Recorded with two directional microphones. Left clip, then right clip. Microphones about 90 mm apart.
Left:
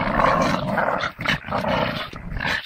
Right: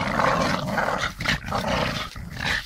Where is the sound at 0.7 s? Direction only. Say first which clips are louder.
Left 3 dB; 35° right (ahead or behind).